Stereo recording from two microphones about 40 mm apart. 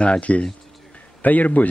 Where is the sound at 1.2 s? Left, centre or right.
Left.